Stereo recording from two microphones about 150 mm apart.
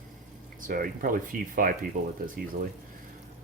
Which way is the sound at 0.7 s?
70° right (ahead or behind).